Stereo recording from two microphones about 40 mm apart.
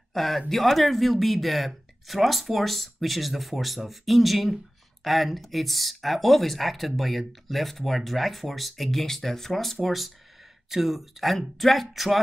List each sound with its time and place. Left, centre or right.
0.1 s speech: centre